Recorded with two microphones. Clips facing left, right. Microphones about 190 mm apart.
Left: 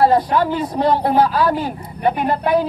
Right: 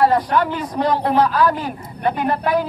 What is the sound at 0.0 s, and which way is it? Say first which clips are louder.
Speech: left 2 dB; 30° left (ahead or behind).